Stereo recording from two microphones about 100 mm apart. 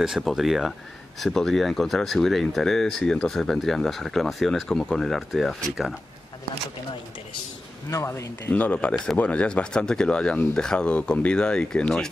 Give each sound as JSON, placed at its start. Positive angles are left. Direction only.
{"t": 0.0, "sound": "speech", "side_deg": -5}
{"t": 7.9, "sound": "speech", "side_deg": 30}
{"t": 8.5, "sound": "speech", "side_deg": 10}